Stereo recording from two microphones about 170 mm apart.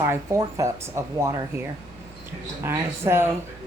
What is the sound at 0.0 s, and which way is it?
Speech, 15° right (ahead or behind).